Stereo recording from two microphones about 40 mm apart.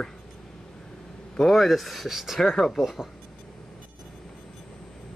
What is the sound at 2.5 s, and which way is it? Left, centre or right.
Speech, centre.